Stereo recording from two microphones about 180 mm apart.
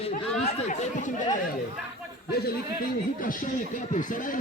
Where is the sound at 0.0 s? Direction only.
40° left (ahead or behind).